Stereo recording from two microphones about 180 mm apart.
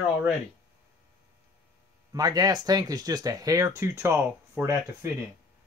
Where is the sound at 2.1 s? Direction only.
20° right (ahead or behind).